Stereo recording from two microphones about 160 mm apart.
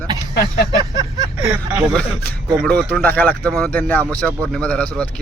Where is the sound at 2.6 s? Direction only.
10° left (ahead or behind).